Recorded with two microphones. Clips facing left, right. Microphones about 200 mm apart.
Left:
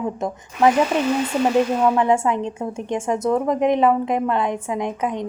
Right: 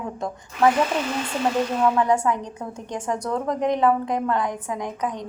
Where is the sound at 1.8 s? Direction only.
20° left (ahead or behind).